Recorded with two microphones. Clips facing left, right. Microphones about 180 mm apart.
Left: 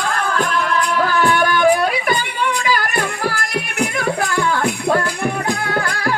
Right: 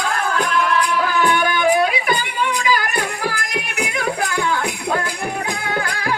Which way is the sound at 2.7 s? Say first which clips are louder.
Left 1 dB; 45° left (ahead or behind).